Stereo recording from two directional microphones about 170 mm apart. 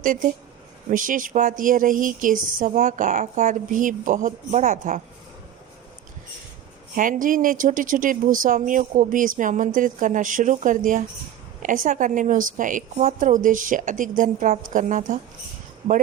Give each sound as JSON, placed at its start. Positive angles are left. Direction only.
{"t": 0.0, "sound": "speech", "side_deg": -55}
{"t": 6.9, "sound": "speech", "side_deg": -50}